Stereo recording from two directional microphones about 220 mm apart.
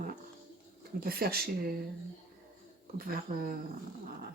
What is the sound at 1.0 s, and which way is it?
Speech, 45° right (ahead or behind).